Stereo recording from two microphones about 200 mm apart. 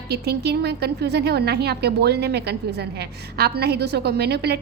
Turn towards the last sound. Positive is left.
turn(degrees=-55)  # may be behind; listen again after turning